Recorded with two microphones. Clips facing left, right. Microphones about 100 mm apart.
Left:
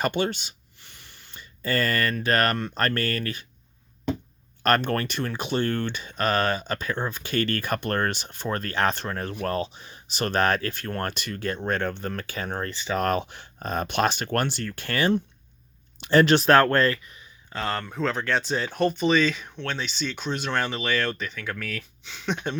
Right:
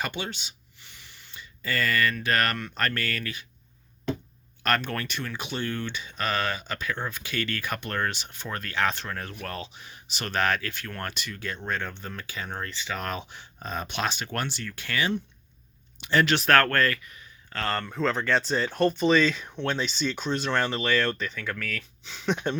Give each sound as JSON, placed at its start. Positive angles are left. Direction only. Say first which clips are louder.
{"t": 0.0, "sound": "speech", "louder": "left 8 dB", "side_deg": 45}
{"t": 4.6, "sound": "speech", "louder": "left 5 dB", "side_deg": 40}
{"t": 13.0, "sound": "speech", "louder": "left 8 dB", "side_deg": 50}
{"t": 22.0, "sound": "speech", "louder": "right 2 dB", "side_deg": 0}